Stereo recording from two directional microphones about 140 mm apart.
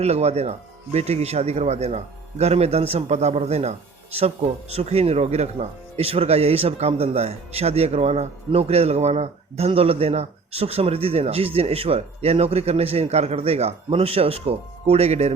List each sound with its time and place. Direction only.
0.0 s a man's voice: 50° right (ahead or behind)